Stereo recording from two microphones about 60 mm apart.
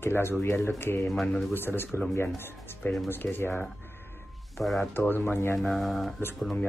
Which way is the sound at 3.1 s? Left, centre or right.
Left.